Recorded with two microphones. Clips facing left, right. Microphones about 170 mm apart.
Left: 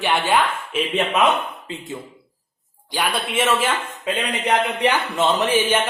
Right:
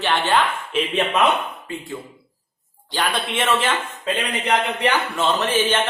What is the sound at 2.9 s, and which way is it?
A man's voice, 10° left (ahead or behind).